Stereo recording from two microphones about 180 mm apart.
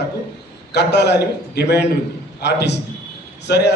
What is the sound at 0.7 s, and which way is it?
A man's voice, 70° left (ahead or behind).